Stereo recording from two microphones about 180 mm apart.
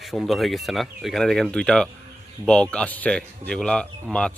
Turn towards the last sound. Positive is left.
turn(degrees=5)  # may be behind; listen again after turning